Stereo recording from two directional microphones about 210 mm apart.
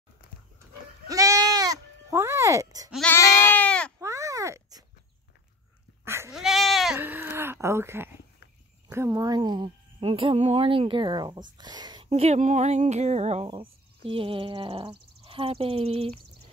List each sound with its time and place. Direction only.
0.6 s goat: 15° right (ahead or behind)
2.9 s goat: 5° left (ahead or behind)
4.0 s a sound: 15° right (ahead or behind)
6.0 s goat: 10° right (ahead or behind)
6.4 s bleat: centre (ahead or behind)
8.8 s speech: 15° right (ahead or behind)
11.5 s a sound: 20° right (ahead or behind)
12.1 s speech: 30° right (ahead or behind)